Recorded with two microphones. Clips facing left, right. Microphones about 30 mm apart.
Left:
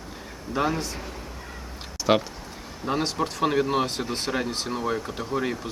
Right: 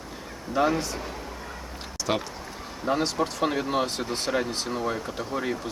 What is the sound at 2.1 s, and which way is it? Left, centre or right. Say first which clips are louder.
Speech: left 6 dB; left.